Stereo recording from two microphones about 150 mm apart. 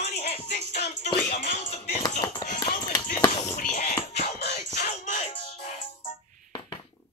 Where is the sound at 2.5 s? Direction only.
60° left (ahead or behind).